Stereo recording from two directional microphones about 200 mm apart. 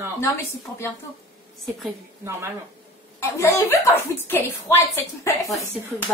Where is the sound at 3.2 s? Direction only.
15° left (ahead or behind).